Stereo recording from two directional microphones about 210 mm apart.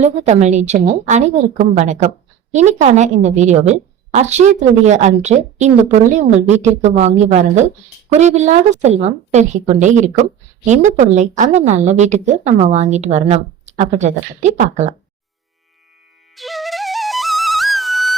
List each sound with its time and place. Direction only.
0.0 s a woman's voice: 30° right (ahead or behind)
16.3 s flute: centre (ahead or behind)